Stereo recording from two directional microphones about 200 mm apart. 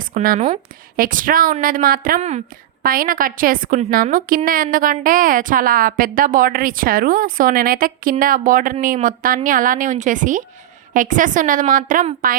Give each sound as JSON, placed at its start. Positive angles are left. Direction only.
{"t": 0.0, "sound": "a woman's voice", "side_deg": -45}